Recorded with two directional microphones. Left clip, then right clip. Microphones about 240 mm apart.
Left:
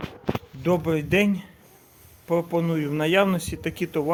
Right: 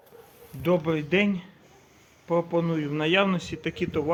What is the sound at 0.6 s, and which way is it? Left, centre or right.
Speech, left.